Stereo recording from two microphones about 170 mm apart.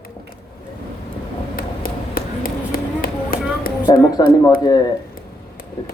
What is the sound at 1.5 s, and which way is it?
Run, 60° left (ahead or behind).